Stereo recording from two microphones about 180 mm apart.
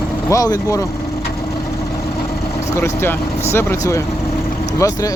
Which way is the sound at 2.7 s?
15° left (ahead or behind).